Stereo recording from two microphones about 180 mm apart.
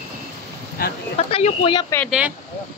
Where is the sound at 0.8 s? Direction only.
55° left (ahead or behind).